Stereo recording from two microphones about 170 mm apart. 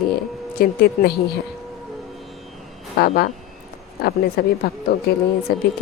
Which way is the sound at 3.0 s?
65° left (ahead or behind).